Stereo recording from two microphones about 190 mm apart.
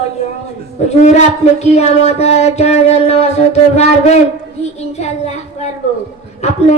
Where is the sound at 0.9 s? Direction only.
35° left (ahead or behind).